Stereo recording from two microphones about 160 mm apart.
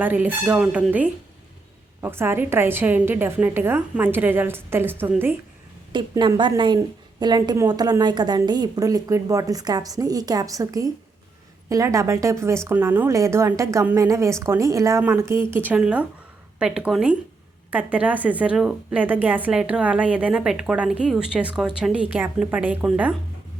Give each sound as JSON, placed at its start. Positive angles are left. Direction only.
{"t": 0.0, "sound": "a woman's voice", "side_deg": -10}
{"t": 5.9, "sound": "a woman's voice", "side_deg": -30}